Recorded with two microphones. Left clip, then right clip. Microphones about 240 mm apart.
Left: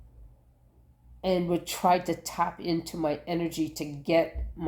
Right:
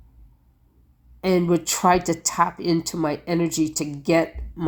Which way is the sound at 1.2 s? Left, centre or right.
Right.